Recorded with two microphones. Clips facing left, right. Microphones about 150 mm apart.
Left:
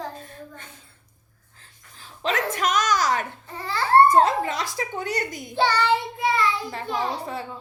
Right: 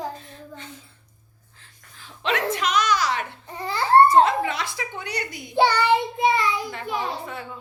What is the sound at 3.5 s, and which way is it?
Child singing, 15° right (ahead or behind).